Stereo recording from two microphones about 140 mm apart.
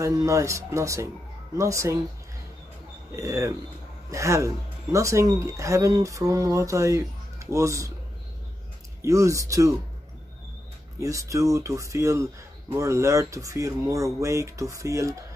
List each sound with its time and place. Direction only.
0.0 s speech: 20° right (ahead or behind)
3.1 s speech: 20° right (ahead or behind)
9.0 s speech: 20° right (ahead or behind)
11.0 s speech: 20° right (ahead or behind)